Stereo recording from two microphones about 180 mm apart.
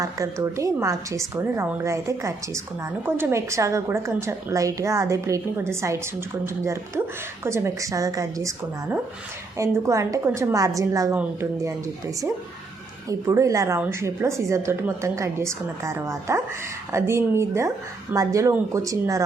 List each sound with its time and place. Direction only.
0.0 s a woman's voice: 20° right (ahead or behind)
13.1 s a woman's voice: 15° right (ahead or behind)